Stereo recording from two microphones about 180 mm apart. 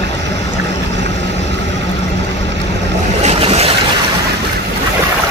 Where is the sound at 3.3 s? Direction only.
35° right (ahead or behind).